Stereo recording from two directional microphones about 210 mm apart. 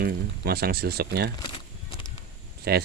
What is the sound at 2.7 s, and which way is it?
Speech, 50° right (ahead or behind).